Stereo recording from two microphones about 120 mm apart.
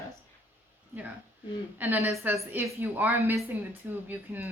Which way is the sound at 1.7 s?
15° right (ahead or behind).